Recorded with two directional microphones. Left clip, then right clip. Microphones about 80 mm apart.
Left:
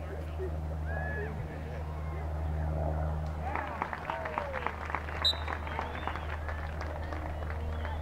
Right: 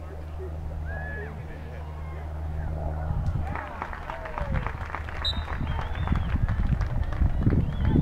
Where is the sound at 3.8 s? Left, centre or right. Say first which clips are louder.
Even; centre.